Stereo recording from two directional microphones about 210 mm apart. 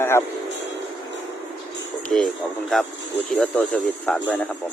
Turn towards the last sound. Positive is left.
turn(degrees=5)  # may be behind; listen again after turning